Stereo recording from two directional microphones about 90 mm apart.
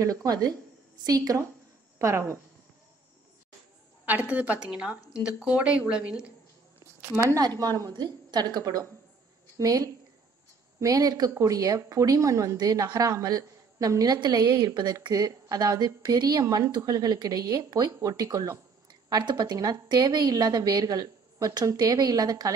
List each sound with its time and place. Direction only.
0.0 s speech: 40° right (ahead or behind)
2.0 s a woman's voice: 30° right (ahead or behind)
4.0 s a woman's voice: 15° right (ahead or behind)
7.0 s speech: 30° right (ahead or behind)
7.3 s speech: 45° right (ahead or behind)
14.7 s speech: 55° right (ahead or behind)